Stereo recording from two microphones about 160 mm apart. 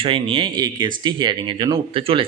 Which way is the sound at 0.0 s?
35° right (ahead or behind).